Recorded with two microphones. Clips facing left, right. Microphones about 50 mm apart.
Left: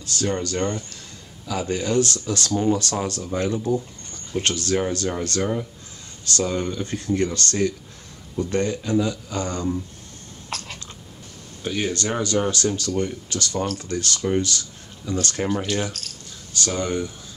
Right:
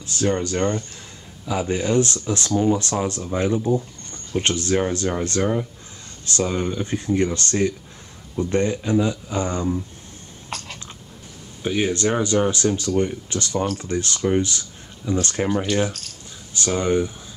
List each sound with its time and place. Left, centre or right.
0.0 s speech: right
10.5 s a sound: centre
11.6 s speech: centre
15.4 s speech: centre
16.5 s speech: centre